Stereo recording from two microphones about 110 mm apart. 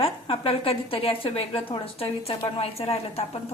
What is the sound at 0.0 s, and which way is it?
A woman's voice, 55° left (ahead or behind).